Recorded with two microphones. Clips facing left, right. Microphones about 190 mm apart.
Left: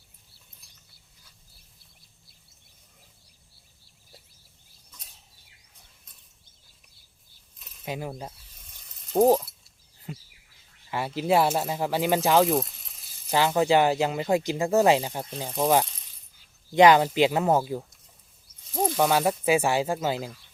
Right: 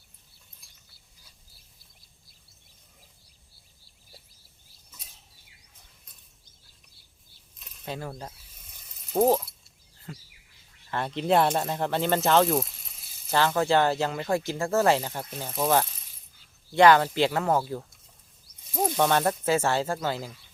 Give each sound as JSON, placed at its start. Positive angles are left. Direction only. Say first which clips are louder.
{"t": 0.6, "sound": "mechanisms", "louder": "left 1 dB", "side_deg": 0}
{"t": 7.9, "sound": "speech", "louder": "left 2 dB", "side_deg": 15}
{"t": 8.5, "sound": "a sound", "louder": "even", "side_deg": -5}
{"t": 10.1, "sound": "bird", "louder": "left 3 dB", "side_deg": 20}
{"t": 10.9, "sound": "speech", "louder": "even", "side_deg": 5}
{"t": 13.3, "sound": "speech", "louder": "left 2 dB", "side_deg": 15}
{"t": 18.8, "sound": "speech", "louder": "left 1 dB", "side_deg": 5}